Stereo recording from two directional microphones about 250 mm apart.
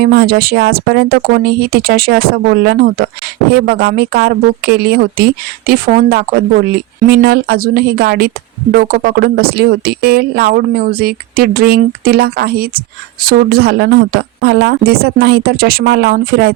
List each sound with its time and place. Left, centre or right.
0.0 s speech: right